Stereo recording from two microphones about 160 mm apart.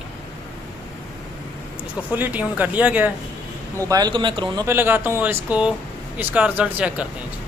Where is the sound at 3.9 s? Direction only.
25° right (ahead or behind).